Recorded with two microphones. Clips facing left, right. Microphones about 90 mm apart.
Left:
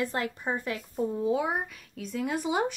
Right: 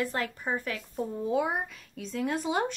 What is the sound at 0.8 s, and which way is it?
Speech, centre (ahead or behind).